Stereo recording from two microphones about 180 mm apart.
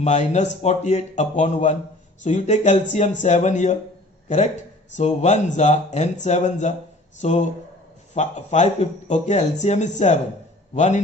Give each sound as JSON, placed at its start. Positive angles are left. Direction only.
{"t": 0.0, "sound": "speech", "side_deg": 40}
{"t": 4.9, "sound": "speech", "side_deg": 40}